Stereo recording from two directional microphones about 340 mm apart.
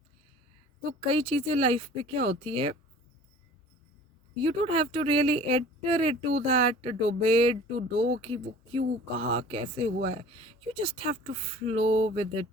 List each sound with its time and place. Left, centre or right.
0.9 s speech: centre
4.7 s speech: centre